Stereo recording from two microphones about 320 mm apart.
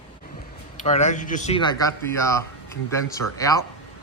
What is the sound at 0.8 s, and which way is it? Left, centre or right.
Speech, left.